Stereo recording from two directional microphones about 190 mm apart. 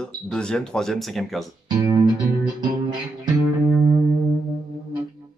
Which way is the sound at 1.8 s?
15° right (ahead or behind).